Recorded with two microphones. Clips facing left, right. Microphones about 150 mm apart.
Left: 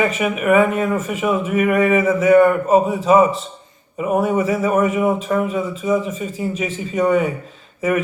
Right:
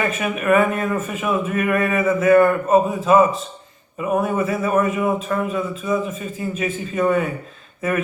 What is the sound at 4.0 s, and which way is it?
A man's voice, 15° left (ahead or behind).